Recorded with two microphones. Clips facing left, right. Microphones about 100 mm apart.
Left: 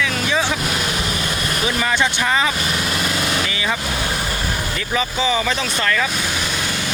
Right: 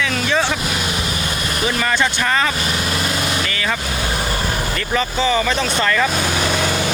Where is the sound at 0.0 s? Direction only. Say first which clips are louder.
Right 1 dB; 5° left (ahead or behind).